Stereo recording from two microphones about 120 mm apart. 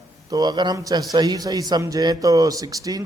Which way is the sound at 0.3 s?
30° right (ahead or behind).